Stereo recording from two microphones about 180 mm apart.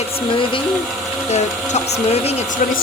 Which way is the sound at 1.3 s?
40° left (ahead or behind).